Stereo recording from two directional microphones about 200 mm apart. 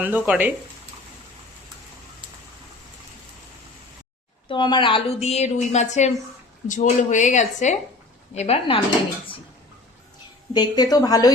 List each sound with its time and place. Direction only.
0.0 s speech: 10° right (ahead or behind)
4.4 s a woman's voice: 25° left (ahead or behind)
10.5 s a woman's voice: 20° left (ahead or behind)